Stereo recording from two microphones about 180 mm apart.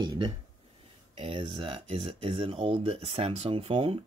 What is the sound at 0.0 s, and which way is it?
Speech, 25° right (ahead or behind).